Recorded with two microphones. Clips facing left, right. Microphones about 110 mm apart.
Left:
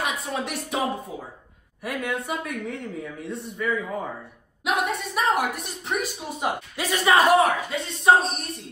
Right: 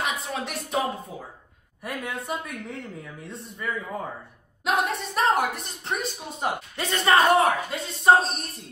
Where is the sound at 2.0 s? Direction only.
Centre (ahead or behind).